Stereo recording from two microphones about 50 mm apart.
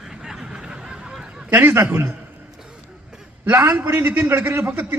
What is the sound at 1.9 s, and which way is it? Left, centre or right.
Speech, right.